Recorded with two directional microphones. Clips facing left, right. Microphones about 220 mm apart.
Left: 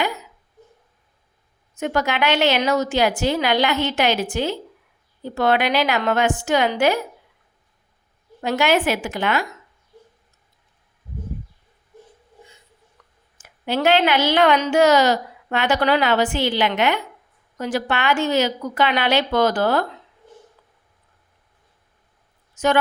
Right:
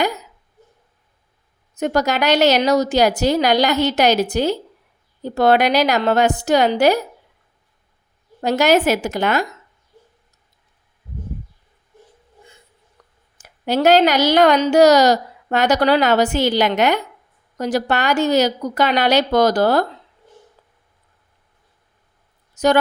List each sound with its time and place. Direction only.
0.0 s a sound: 40° right (ahead or behind)
1.7 s speech: 40° right (ahead or behind)
8.4 s speech: 40° right (ahead or behind)
13.0 s a sound: 35° right (ahead or behind)
13.4 s speech: 40° right (ahead or behind)
22.5 s a woman's voice: 35° right (ahead or behind)